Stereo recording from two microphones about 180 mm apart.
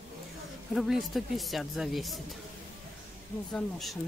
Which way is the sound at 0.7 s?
Centre (ahead or behind).